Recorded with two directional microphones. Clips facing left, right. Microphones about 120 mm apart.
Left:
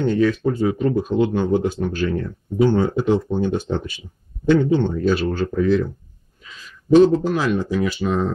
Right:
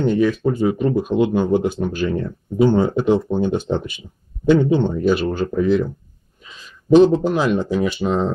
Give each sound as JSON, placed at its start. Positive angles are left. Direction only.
{"t": 0.0, "sound": "speech", "side_deg": -10}